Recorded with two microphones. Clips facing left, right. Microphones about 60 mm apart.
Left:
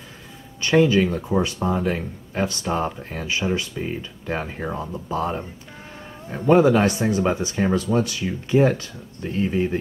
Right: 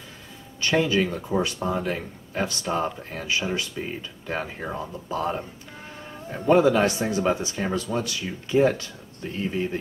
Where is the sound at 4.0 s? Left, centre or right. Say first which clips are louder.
Left 3 dB; left.